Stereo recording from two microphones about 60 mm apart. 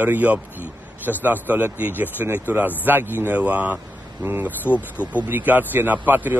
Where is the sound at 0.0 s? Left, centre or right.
Right.